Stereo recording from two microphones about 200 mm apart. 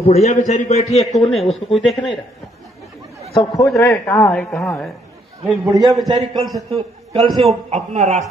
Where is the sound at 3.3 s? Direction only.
20° left (ahead or behind).